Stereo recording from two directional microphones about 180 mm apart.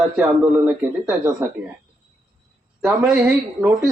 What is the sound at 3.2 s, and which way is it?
Speech, 10° right (ahead or behind).